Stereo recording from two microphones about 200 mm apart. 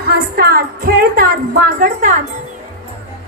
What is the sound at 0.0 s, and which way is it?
A woman's voice, 50° right (ahead or behind).